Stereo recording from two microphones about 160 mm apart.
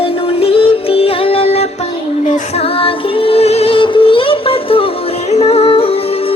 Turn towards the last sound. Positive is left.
turn(degrees=35)  # may be behind; listen again after turning